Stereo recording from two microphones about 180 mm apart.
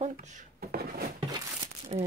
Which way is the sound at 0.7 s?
60° right (ahead or behind).